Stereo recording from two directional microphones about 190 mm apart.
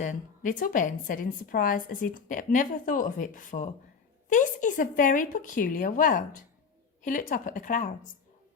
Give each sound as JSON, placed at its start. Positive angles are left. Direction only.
{"t": 0.0, "sound": "a woman's voice", "side_deg": 40}